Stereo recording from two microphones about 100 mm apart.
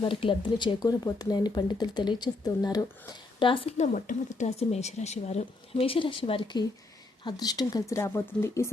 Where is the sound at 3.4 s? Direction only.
60° left (ahead or behind).